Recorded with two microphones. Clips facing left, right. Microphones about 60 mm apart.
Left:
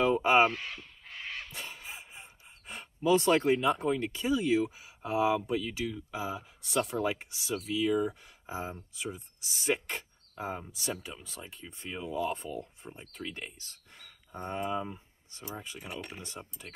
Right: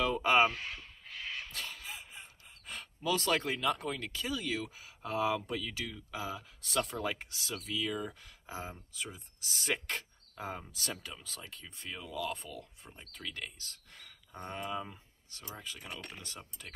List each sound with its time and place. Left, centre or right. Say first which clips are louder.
0.1 s speech: left 1 dB; centre
1.5 s speech: even; centre
12.9 s speech: left 3 dB; centre
15.8 s speech: left 4 dB; centre
16.2 s speech: left 4 dB; centre